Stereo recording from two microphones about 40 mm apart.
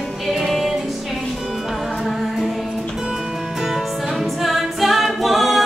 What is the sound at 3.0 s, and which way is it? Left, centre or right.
Music, centre.